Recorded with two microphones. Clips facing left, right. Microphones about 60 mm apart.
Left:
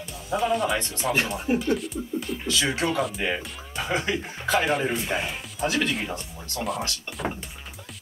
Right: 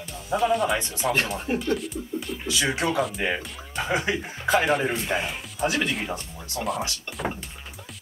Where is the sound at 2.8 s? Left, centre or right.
Centre.